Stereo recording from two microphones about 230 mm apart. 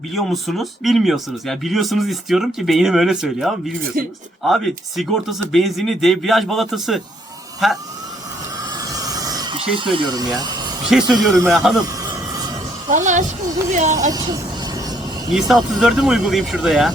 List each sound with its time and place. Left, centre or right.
0.1 s speech: centre
4.0 s speech: right
4.4 s speech: centre
8.7 s a sound: centre
10.9 s speech: centre
12.9 s speech: right
14.1 s vehicle: centre
15.3 s speech: centre